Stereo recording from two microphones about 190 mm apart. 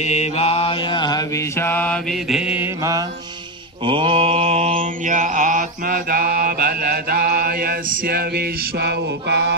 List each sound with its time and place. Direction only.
0.0 s mantra: 35° left (ahead or behind)
1.6 s mantra: 10° left (ahead or behind)
2.2 s mantra: 5° right (ahead or behind)
3.8 s mantra: 30° right (ahead or behind); by 9.6 s 60° right (ahead or behind)